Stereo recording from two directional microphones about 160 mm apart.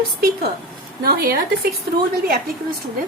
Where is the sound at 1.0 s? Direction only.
70° right (ahead or behind).